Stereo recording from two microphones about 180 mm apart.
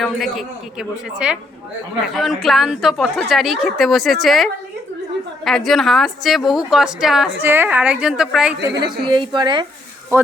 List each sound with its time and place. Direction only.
0.0 s a woman's voice: centre (ahead or behind)
5.5 s a woman's voice: centre (ahead or behind)
9.0 s speech: 25° right (ahead or behind)